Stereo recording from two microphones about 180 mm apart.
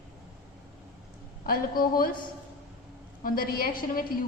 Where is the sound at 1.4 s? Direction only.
55° left (ahead or behind).